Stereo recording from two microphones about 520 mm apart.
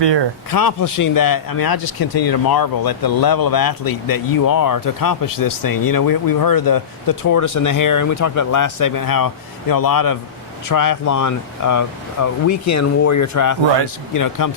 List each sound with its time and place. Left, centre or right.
0.0 s speech: right
0.5 s speech: left